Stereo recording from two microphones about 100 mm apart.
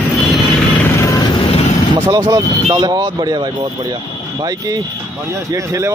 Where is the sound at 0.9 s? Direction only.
30° left (ahead or behind).